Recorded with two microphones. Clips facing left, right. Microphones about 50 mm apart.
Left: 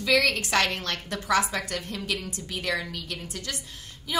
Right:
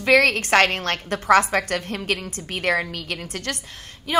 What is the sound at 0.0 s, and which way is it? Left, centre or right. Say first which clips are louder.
A woman's voice: right 6 dB; right.